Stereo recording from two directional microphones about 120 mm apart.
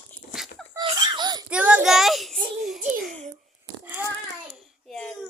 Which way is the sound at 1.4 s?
10° right (ahead or behind).